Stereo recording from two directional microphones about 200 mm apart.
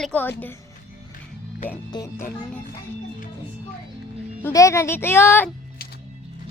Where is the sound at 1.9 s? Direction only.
20° left (ahead or behind).